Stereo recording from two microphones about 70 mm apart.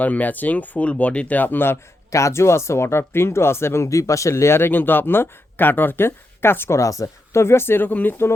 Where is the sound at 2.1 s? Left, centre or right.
Left.